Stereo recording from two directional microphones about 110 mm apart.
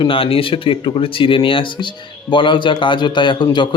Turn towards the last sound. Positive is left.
turn(degrees=45)  # may be behind; listen again after turning